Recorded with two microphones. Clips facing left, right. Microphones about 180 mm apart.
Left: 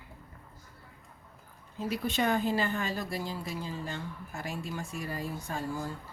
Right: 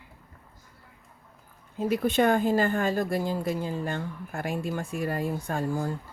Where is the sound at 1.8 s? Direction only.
55° right (ahead or behind).